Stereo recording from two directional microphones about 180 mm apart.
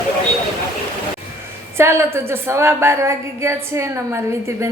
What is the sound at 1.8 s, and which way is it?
A woman's voice, 15° right (ahead or behind).